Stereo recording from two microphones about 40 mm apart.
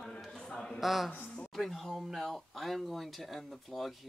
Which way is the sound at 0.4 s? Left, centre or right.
Centre.